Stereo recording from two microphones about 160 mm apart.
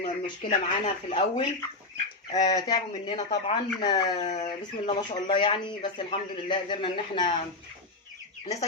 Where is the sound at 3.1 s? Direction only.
40° left (ahead or behind).